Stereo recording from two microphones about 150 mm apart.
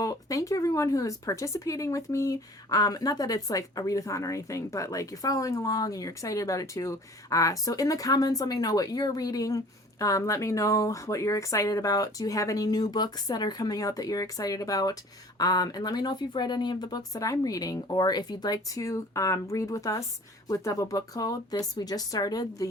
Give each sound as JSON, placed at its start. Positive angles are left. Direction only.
{"t": 0.0, "sound": "speech", "side_deg": 20}